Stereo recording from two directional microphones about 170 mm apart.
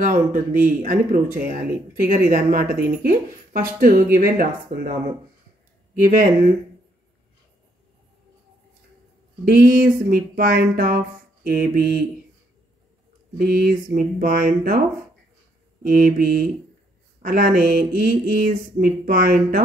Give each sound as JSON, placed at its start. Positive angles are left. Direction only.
{"t": 0.0, "sound": "speech", "side_deg": -50}
{"t": 9.4, "sound": "speech", "side_deg": -55}
{"t": 13.4, "sound": "speech", "side_deg": -65}